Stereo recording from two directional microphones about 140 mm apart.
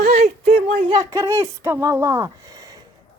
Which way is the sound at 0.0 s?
90° right.